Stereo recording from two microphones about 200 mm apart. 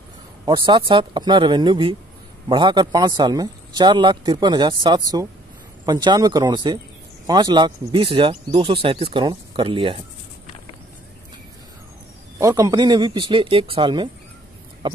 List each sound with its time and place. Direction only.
0.5 s a man's voice: 25° right (ahead or behind)
12.4 s a man's voice: 15° right (ahead or behind)